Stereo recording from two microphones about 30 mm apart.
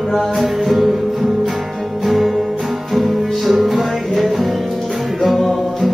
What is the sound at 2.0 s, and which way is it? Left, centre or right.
Music, centre.